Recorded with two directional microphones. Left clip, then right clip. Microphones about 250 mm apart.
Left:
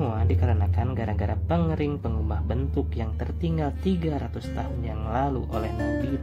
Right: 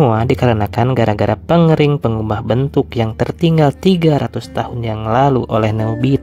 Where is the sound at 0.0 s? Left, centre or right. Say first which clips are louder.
Right 17 dB; right.